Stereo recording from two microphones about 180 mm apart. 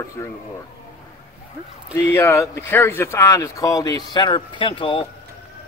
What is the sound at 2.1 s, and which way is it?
Speech, 15° left (ahead or behind).